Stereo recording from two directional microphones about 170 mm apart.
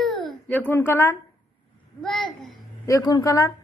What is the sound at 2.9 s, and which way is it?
Speech, 20° left (ahead or behind).